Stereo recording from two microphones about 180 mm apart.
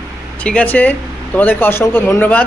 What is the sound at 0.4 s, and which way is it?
Speech, 5° left (ahead or behind).